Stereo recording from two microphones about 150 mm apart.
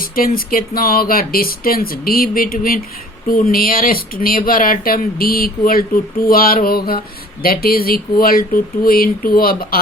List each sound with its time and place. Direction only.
0.0 s speech: 75° left (ahead or behind)